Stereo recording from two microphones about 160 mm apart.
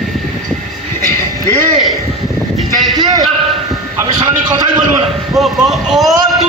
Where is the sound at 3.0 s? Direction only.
25° right (ahead or behind).